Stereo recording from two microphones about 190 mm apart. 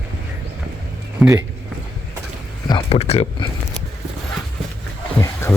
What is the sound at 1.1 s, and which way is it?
Speech, 15° right (ahead or behind).